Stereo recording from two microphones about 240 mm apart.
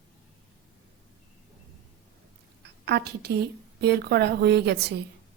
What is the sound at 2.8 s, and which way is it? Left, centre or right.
A woman's voice, right.